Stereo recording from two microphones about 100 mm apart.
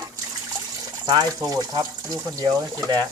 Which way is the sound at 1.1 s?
40° right (ahead or behind).